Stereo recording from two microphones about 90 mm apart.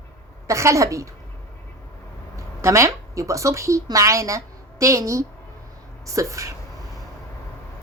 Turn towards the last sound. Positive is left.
turn(degrees=-35)  # may be behind; listen again after turning